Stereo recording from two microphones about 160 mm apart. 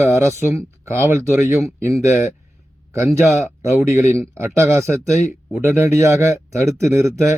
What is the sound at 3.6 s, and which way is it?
A man's voice, 15° right (ahead or behind).